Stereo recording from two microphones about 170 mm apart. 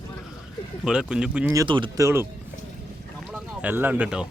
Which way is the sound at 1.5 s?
30° right (ahead or behind).